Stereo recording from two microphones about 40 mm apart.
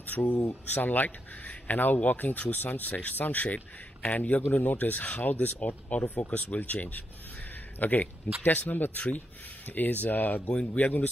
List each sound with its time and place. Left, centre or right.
0.0 s speech: left
10.5 s speech: left
10.8 s speech: left